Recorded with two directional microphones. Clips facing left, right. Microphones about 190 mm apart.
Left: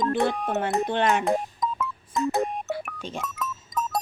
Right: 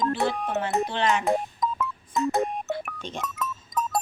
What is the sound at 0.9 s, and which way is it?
Speech, 50° left (ahead or behind).